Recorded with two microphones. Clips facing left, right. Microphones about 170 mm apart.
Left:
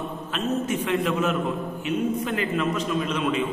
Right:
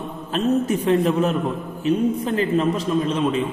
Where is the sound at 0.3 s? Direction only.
35° right (ahead or behind).